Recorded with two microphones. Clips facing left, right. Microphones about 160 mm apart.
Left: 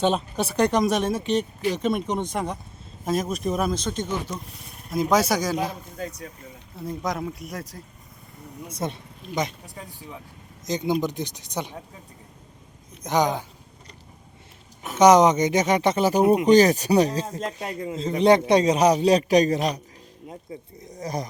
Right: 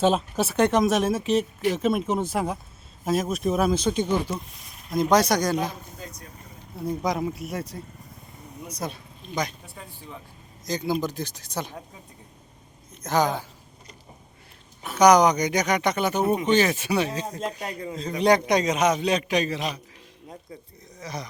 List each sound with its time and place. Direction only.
0.0 s speech: centre (ahead or behind)
4.9 s speech: 5° left (ahead or behind)
6.0 s speech: 70° left (ahead or behind)
6.7 s speech: centre (ahead or behind)
8.7 s speech: 25° left (ahead or behind)
10.7 s speech: 20° left (ahead or behind)
13.0 s speech: 15° left (ahead or behind)
14.9 s speech: 25° left (ahead or behind)
16.2 s speech: 10° left (ahead or behind)
16.5 s a man's voice: 40° left (ahead or behind)
17.4 s speech: centre (ahead or behind)
17.9 s a man's voice: 25° left (ahead or behind); by 19.8 s 40° left (ahead or behind)
21.0 s speech: 45° left (ahead or behind)